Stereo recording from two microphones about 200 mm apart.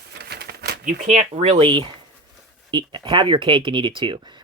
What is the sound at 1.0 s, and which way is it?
Speech, 35° right (ahead or behind).